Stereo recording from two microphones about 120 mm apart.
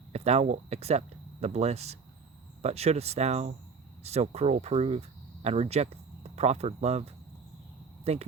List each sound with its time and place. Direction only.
0.1 s speech: 60° right (ahead or behind)